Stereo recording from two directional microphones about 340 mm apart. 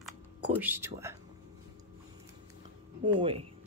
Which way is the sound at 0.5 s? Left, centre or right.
Centre.